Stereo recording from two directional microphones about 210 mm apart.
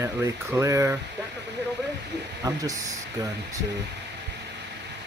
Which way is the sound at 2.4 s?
15° right (ahead or behind).